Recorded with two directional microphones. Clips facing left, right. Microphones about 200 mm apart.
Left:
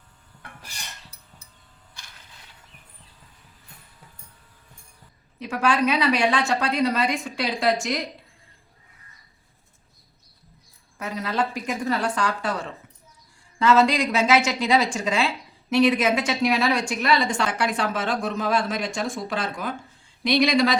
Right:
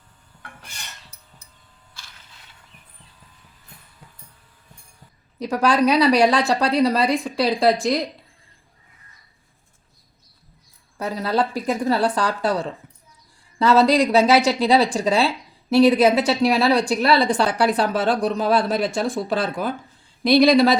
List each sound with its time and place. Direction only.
5.4 s a woman's voice: 40° right (ahead or behind)
10.9 s a woman's voice: 35° right (ahead or behind)